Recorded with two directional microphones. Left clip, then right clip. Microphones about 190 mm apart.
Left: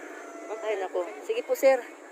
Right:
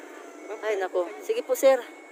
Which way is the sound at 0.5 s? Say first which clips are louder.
Even; 60° right (ahead or behind).